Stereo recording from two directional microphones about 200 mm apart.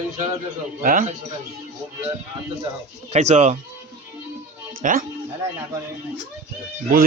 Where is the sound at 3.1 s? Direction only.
35° right (ahead or behind).